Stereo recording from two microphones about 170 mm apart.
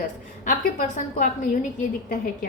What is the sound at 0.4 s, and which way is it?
Speech, 45° left (ahead or behind).